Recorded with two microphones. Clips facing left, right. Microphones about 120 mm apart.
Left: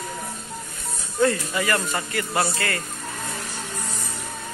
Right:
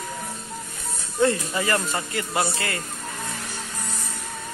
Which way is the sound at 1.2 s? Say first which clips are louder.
Even; 25° right (ahead or behind).